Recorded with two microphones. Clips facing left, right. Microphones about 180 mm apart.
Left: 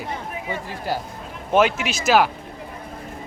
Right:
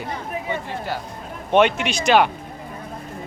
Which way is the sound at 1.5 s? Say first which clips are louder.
Right 2 dB; centre (ahead or behind).